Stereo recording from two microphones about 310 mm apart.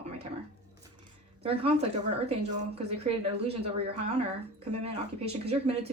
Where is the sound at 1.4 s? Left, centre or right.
Centre.